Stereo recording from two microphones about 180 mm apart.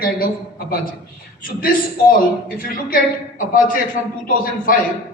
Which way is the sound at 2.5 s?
50° left (ahead or behind).